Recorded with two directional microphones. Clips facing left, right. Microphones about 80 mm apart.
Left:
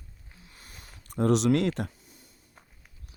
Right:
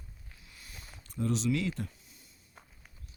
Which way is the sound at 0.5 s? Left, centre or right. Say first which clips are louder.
Even; left.